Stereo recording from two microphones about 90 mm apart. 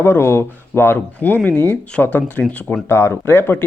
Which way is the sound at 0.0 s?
25° left (ahead or behind).